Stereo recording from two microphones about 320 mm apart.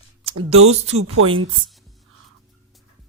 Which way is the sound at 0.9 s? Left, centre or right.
Right.